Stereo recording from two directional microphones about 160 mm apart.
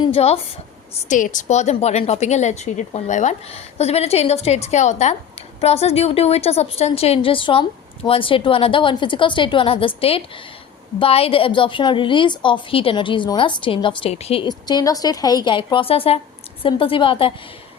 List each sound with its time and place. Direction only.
0.1 s a woman's voice: 40° left (ahead or behind)
1.0 s a woman's voice: 50° left (ahead or behind)
14.4 s a woman's voice: 25° left (ahead or behind)